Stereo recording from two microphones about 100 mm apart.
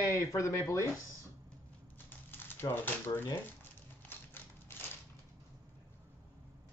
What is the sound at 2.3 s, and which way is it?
Crumpling, 20° left (ahead or behind).